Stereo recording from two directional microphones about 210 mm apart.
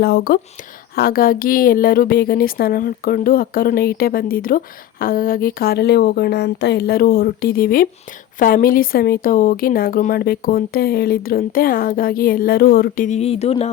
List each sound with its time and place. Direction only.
0.0 s speech: 50° left (ahead or behind); by 13.7 s 30° left (ahead or behind)